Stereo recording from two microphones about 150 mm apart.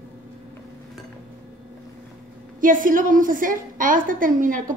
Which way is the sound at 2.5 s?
65° right (ahead or behind).